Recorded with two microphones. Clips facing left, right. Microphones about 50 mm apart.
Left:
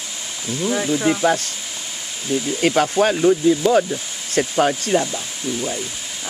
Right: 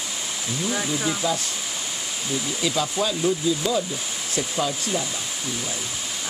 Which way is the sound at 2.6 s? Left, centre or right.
Left.